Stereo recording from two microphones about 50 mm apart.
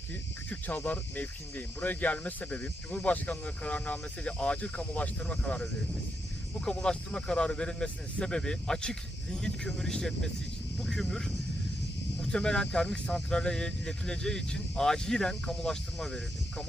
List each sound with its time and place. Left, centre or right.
0.9 s speech: left
6.7 s speech: centre
12.2 s speech: centre